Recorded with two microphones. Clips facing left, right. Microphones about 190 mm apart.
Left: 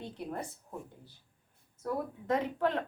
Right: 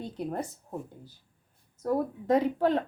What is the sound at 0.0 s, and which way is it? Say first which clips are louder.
Speech: right 6 dB; 40° right (ahead or behind).